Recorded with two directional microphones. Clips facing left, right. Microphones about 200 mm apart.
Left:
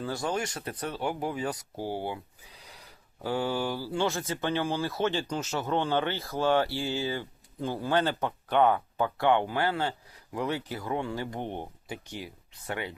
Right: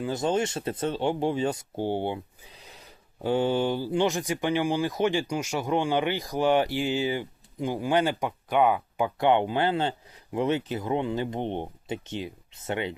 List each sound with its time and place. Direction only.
0.0 s speech: 20° right (ahead or behind)